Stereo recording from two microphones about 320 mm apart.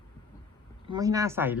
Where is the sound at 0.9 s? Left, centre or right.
Centre.